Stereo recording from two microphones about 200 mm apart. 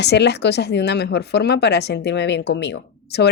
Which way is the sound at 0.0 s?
55° left (ahead or behind).